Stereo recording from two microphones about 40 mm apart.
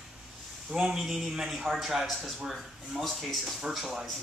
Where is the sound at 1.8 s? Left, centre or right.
Centre.